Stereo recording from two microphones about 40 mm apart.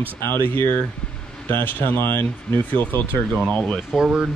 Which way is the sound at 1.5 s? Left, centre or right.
Left.